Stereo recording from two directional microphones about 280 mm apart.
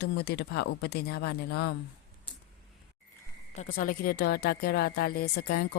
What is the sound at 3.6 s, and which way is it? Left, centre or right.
A woman's voice, left.